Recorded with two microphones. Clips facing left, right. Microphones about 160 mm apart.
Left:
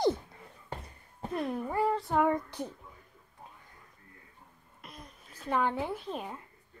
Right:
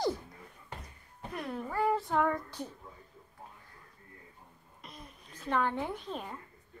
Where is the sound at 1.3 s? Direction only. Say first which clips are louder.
Left 5 dB; 25° left (ahead or behind).